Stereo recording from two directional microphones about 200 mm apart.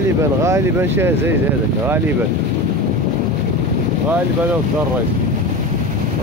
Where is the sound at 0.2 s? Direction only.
15° right (ahead or behind).